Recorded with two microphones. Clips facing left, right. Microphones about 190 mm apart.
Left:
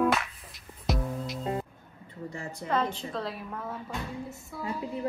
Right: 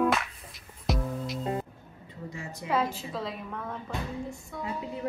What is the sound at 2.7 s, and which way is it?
A woman's voice, 5° right (ahead or behind).